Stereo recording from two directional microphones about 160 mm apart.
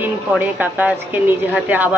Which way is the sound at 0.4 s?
10° right (ahead or behind).